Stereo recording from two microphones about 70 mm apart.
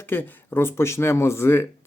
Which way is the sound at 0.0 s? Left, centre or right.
Left.